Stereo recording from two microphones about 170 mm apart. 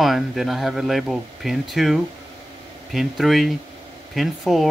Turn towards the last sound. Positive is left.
turn(degrees=0)  # may be behind; listen again after turning